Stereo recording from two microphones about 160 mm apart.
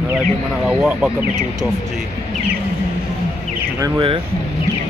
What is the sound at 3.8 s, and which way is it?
Speech, 20° right (ahead or behind).